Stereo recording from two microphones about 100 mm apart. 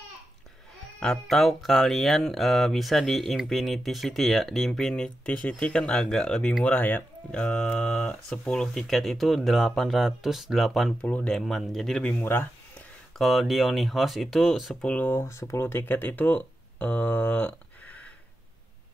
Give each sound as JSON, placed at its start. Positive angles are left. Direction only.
{"t": 0.9, "sound": "speech", "side_deg": 5}
{"t": 11.0, "sound": "speech", "side_deg": 15}
{"t": 11.3, "sound": "speech", "side_deg": 0}
{"t": 12.1, "sound": "speech", "side_deg": 20}
{"t": 13.2, "sound": "speech", "side_deg": 0}
{"t": 14.8, "sound": "speech", "side_deg": 15}
{"t": 15.1, "sound": "speech", "side_deg": 30}